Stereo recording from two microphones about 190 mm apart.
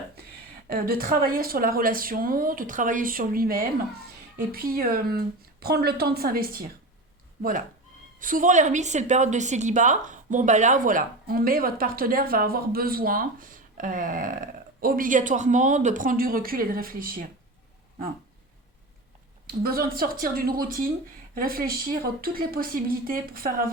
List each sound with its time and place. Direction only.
0.7 s a woman's voice: 50° right (ahead or behind)
8.2 s a woman's voice: 45° right (ahead or behind)
19.5 s a woman's voice: 50° right (ahead or behind)